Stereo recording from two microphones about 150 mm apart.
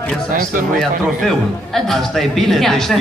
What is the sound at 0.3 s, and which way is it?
Speech, 65° right (ahead or behind).